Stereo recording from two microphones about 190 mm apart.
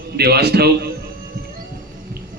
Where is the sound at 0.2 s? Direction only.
55° right (ahead or behind).